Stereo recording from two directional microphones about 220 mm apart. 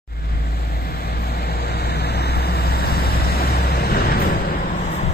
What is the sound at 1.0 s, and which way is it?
Vehicle, 45° left (ahead or behind).